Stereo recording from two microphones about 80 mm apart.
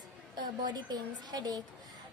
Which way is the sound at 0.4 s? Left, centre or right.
Right.